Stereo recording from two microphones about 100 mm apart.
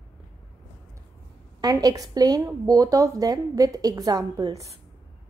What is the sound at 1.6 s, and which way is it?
Speech, 40° right (ahead or behind).